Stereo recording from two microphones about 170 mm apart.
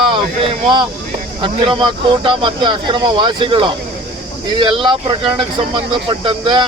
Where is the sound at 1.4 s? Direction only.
30° right (ahead or behind).